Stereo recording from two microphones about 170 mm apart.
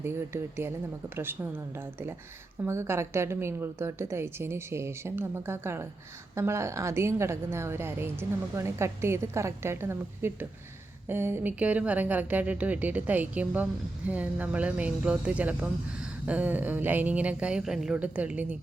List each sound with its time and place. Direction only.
0.0 s a woman's voice: 15° right (ahead or behind)
2.6 s a woman's voice: 15° right (ahead or behind)